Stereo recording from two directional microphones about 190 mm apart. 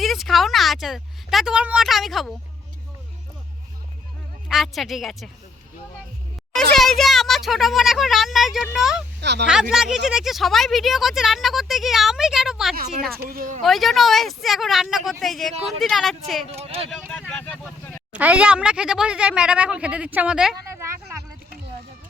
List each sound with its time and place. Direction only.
0.0 s speech: centre (ahead or behind)
4.4 s a woman's voice: centre (ahead or behind)
6.5 s a woman's voice: centre (ahead or behind)
9.2 s speech: 65° right (ahead or behind)
9.5 s a woman's voice: 5° right (ahead or behind)
12.7 s speech: 50° right (ahead or behind)
13.6 s a woman's voice: centre (ahead or behind)
16.5 s speech: 30° right (ahead or behind)
17.1 s speech: 5° left (ahead or behind)
18.1 s a woman's voice: 5° right (ahead or behind)
20.7 s a sound: 15° right (ahead or behind)